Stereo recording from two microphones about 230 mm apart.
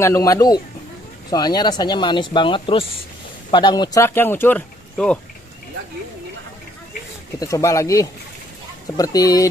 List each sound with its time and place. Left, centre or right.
0.0 s speech: centre
7.3 s speech: centre